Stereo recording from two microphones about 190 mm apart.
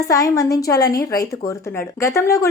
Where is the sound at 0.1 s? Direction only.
20° left (ahead or behind).